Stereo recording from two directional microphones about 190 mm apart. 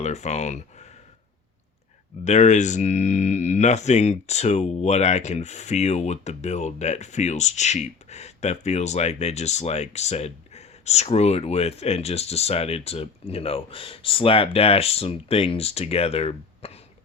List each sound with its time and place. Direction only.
0.0 s speech: 35° left (ahead or behind)
2.2 s speech: 40° left (ahead or behind)